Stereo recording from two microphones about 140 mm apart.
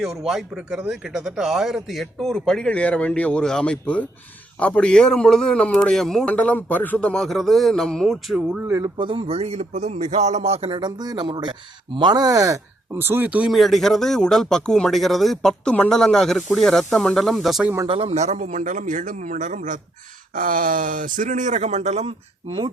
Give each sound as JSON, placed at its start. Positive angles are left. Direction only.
{"t": 0.0, "sound": "speech", "side_deg": 0}
{"t": 9.0, "sound": "a man's voice", "side_deg": -40}
{"t": 13.5, "sound": "speech", "side_deg": 0}
{"t": 17.8, "sound": "speech", "side_deg": -45}
{"t": 20.3, "sound": "speech", "side_deg": -85}